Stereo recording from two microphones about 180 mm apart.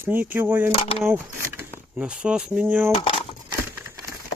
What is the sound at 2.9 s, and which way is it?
Speech, 30° left (ahead or behind).